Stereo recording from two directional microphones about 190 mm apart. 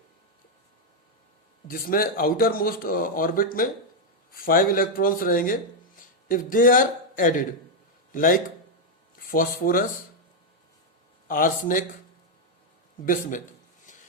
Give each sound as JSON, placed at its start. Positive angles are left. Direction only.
{"t": 1.6, "sound": "a man's voice", "side_deg": 50}
{"t": 11.3, "sound": "speech", "side_deg": 45}